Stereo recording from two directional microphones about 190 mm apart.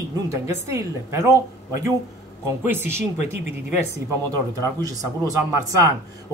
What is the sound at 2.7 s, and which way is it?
Speech, 10° right (ahead or behind).